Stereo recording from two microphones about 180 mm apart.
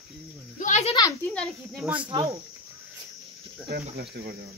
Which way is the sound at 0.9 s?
20° left (ahead or behind).